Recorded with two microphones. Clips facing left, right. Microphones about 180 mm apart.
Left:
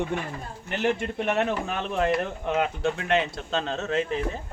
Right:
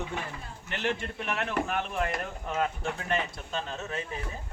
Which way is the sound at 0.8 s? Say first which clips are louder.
Left 7 dB; 65° left (ahead or behind).